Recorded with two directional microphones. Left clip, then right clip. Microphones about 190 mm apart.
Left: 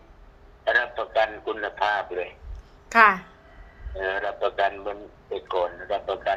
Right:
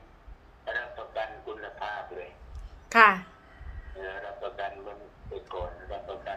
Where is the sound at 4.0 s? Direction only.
60° left (ahead or behind).